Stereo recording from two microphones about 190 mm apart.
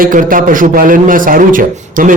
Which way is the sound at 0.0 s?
45° right (ahead or behind).